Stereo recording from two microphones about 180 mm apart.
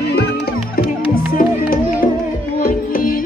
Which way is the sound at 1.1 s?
55° left (ahead or behind).